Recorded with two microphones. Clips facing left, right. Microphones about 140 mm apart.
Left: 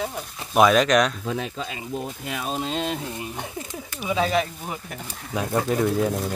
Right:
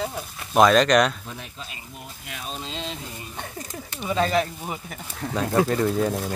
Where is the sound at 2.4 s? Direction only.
55° left (ahead or behind).